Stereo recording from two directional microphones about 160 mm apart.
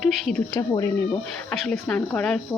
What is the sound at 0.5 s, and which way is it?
Speech, 25° left (ahead or behind).